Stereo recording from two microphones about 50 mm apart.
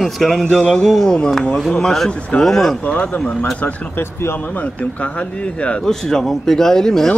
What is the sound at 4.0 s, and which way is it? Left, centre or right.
Speech, left.